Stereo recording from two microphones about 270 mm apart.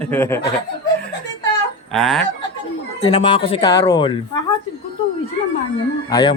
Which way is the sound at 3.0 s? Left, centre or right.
Centre.